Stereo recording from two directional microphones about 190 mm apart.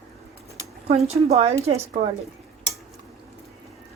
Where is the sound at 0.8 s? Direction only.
35° right (ahead or behind).